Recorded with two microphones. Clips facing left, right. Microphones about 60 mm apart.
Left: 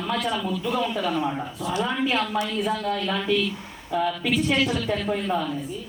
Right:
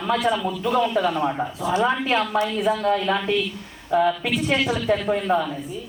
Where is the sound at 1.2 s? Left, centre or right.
Right.